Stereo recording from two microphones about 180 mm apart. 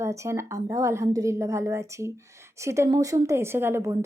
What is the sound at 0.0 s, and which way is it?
Speech, 15° right (ahead or behind).